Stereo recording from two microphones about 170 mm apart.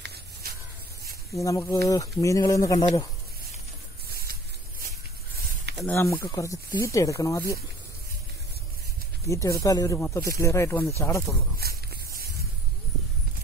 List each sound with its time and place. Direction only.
0.0 s spray: 65° right (ahead or behind)
1.0 s speech: 20° left (ahead or behind)
4.1 s a sound: 60° right (ahead or behind)
5.9 s speech: 15° left (ahead or behind)
9.3 s speech: 20° left (ahead or behind)
9.9 s speech: 10° left (ahead or behind)
11.5 s a sound: 65° right (ahead or behind)